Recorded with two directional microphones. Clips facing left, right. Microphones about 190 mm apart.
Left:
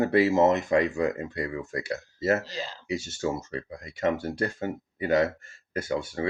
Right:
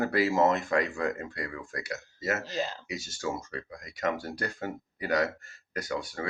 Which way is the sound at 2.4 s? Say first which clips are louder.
Right 4 dB; 50° right (ahead or behind).